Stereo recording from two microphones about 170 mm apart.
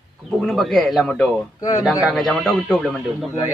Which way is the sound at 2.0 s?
Centre (ahead or behind).